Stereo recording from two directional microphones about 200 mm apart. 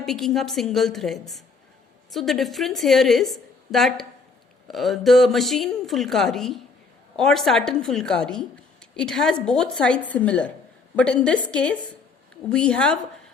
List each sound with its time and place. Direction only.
0.0 s a woman's voice: centre (ahead or behind)